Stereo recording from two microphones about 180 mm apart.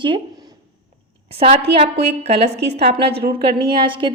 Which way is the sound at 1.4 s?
35° right (ahead or behind).